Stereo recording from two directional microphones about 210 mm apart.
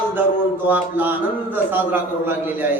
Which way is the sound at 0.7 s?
10° right (ahead or behind).